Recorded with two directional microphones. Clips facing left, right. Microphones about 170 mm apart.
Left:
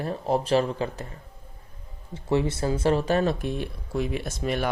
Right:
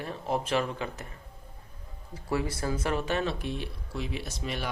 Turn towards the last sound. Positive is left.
turn(degrees=50)  # may be behind; listen again after turning